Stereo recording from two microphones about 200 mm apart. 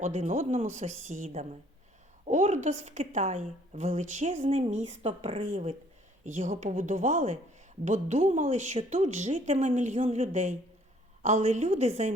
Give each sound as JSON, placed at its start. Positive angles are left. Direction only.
{"t": 0.0, "sound": "a woman's voice", "side_deg": -35}
{"t": 5.4, "sound": "a woman's voice", "side_deg": -40}